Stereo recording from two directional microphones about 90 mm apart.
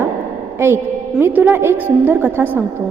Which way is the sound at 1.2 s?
20° right (ahead or behind).